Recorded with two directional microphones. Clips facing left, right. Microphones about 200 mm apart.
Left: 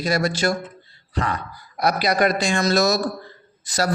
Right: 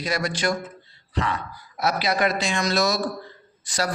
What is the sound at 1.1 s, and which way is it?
A man's voice, 45° left (ahead or behind).